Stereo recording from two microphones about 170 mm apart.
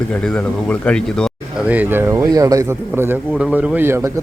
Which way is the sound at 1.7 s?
10° right (ahead or behind).